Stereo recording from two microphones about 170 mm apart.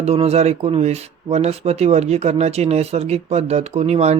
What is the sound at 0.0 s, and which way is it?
Speech, 40° right (ahead or behind).